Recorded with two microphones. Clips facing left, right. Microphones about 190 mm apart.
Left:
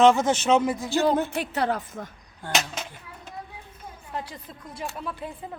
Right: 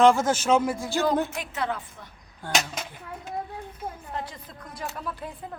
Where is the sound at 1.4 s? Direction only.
35° left (ahead or behind).